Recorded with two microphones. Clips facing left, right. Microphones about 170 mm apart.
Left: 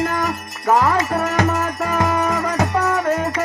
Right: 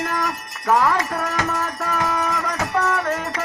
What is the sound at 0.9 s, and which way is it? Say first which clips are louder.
Music: left 3 dB; 10° left (ahead or behind).